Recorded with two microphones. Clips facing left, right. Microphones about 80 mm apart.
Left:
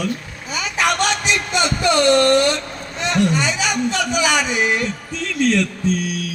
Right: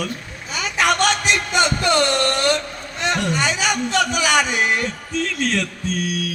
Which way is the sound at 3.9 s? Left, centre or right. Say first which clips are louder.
Right 3 dB; right.